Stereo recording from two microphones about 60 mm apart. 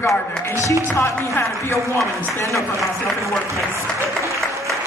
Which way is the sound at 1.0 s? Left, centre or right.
Left.